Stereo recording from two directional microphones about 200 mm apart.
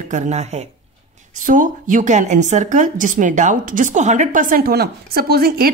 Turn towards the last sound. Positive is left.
turn(degrees=-50)  # may be behind; listen again after turning